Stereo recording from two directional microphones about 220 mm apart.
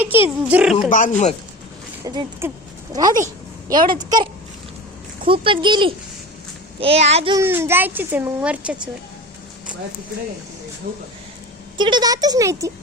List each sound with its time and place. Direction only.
0.0 s a child's voice: 10° right (ahead or behind)
0.9 s speech: 35° left (ahead or behind)
2.0 s a child's voice: 15° right (ahead or behind)
3.7 s a child's voice: 40° right (ahead or behind)
5.2 s speech: 25° right (ahead or behind)
7.3 s a child's voice: 10° right (ahead or behind)
11.8 s a child's voice: 20° right (ahead or behind)